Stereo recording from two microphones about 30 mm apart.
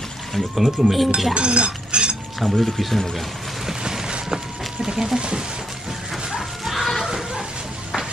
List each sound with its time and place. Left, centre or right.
0.3 s speech: centre
1.3 s a sound: right
2.4 s speech: centre
4.9 s speech: centre
6.6 s music: centre